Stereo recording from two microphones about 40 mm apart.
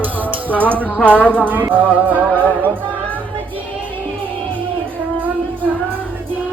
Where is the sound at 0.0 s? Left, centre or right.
Right.